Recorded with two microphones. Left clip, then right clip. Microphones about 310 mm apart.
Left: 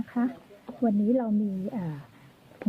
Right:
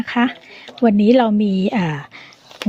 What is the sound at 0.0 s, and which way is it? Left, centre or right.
A woman's voice, right.